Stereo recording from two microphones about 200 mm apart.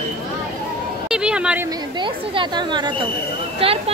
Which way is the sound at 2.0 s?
25° right (ahead or behind).